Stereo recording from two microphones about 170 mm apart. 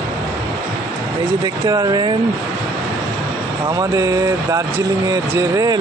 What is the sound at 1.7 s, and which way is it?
Speech, 20° right (ahead or behind).